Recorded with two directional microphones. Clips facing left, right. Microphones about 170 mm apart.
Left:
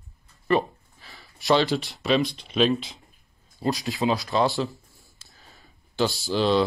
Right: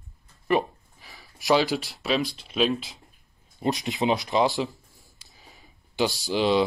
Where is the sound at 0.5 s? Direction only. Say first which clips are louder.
Left 1 dB; 15° right (ahead or behind).